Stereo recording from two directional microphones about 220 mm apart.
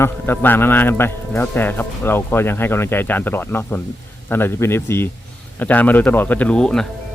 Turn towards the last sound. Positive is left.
turn(degrees=5)  # may be behind; listen again after turning